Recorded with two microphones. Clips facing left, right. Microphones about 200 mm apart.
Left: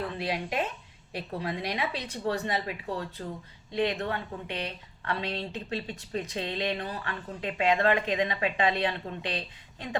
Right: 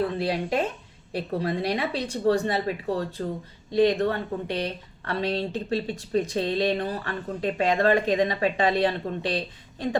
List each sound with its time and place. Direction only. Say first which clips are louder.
0.2 s a woman's voice: right 5 dB; 30° right (ahead or behind)